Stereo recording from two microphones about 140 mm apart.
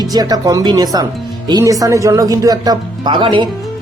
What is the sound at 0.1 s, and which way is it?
Speech, 25° right (ahead or behind).